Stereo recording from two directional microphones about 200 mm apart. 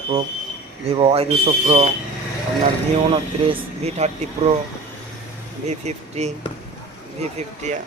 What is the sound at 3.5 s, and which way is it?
Speech, 35° right (ahead or behind).